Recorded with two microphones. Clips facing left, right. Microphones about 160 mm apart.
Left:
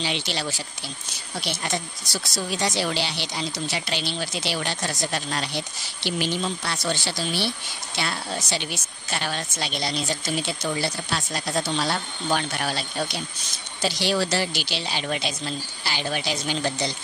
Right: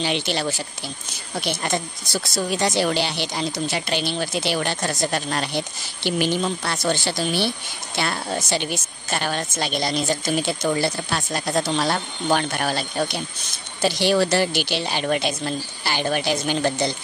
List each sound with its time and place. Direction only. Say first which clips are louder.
0.0 s speech: right 5 dB; 50° right (ahead or behind)